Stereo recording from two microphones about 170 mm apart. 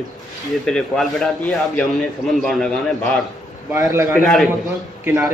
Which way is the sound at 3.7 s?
15° right (ahead or behind).